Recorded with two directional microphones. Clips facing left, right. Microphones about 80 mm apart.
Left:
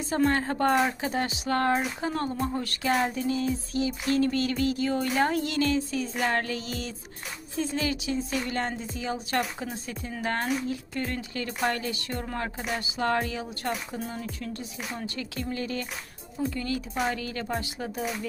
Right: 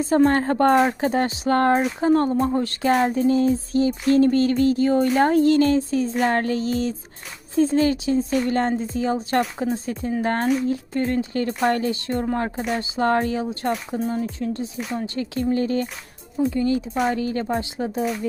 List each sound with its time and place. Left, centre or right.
0.0 s speech: right